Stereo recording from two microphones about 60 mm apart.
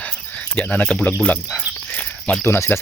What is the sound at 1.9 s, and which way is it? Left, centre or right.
Cricket, left.